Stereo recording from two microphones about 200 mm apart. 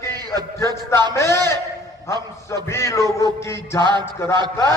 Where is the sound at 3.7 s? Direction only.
20° right (ahead or behind).